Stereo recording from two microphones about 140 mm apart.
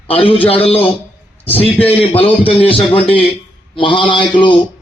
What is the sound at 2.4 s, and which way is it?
A man's voice, 40° left (ahead or behind).